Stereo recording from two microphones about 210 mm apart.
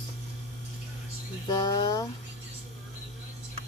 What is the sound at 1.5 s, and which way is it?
Speech, 20° left (ahead or behind).